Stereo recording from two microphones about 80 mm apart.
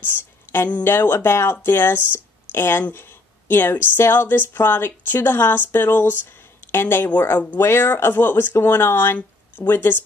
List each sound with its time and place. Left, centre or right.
0.0 s speech: left